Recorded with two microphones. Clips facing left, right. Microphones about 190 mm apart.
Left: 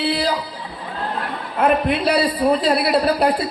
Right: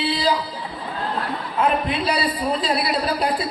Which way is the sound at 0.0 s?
60° left (ahead or behind).